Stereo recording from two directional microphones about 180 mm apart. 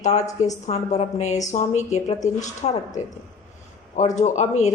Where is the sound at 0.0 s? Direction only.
40° left (ahead or behind).